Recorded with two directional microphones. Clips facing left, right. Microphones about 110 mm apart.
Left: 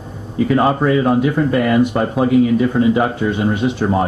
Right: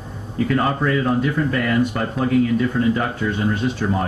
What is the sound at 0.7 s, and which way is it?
Speech, 20° left (ahead or behind).